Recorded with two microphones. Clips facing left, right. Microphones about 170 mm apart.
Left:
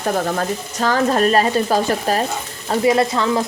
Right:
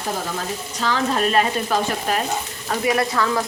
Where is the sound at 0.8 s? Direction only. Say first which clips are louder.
Left 5 dB; 45° left (ahead or behind).